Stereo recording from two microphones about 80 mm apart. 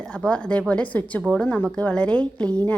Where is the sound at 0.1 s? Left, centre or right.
Centre.